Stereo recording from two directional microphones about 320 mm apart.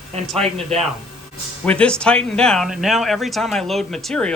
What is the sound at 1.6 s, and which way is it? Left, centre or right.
Speech, centre.